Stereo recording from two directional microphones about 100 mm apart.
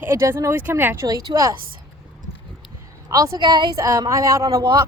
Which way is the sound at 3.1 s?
40° right (ahead or behind).